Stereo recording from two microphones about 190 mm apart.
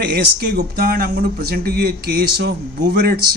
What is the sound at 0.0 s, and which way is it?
Speech, 55° right (ahead or behind).